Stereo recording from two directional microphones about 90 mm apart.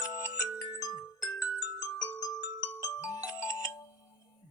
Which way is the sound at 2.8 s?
40° left (ahead or behind).